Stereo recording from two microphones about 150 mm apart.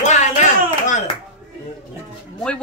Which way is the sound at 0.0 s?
55° left (ahead or behind).